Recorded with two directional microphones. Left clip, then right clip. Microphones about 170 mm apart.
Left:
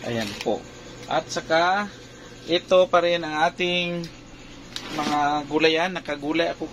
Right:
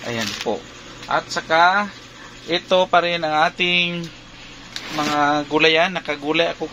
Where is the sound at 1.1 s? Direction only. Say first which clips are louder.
Right 4 dB; 25° right (ahead or behind).